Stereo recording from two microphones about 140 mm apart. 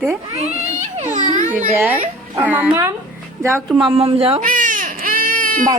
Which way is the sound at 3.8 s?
40° right (ahead or behind).